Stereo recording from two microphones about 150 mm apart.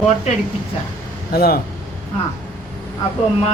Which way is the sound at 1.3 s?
90° left.